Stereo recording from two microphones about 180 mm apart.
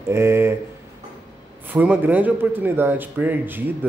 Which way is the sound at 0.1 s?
15° right (ahead or behind).